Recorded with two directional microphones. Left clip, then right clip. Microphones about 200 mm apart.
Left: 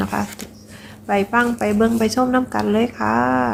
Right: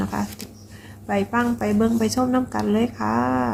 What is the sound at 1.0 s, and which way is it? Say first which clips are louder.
Speech: left 5 dB; 10° left (ahead or behind).